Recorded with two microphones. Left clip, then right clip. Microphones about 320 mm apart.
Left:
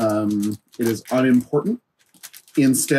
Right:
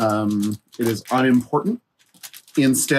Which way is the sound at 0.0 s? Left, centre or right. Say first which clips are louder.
Even; right.